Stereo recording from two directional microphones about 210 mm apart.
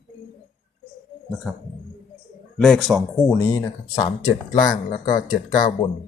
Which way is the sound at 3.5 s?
15° left (ahead or behind).